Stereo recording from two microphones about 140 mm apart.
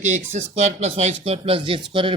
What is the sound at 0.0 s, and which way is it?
Speech, 55° right (ahead or behind).